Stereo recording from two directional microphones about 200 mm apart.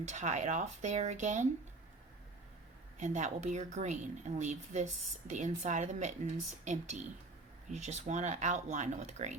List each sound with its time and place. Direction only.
0.1 s speech: 35° right (ahead or behind)
3.0 s speech: 35° right (ahead or behind)